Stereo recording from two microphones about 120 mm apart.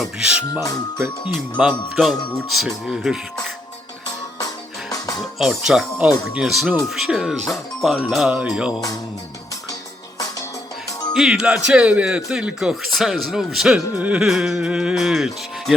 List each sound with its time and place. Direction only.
0.0 s speech: 5° right (ahead or behind)
4.4 s music: 30° left (ahead or behind)
5.4 s speech: 5° right (ahead or behind)
11.1 s speech: 5° right (ahead or behind)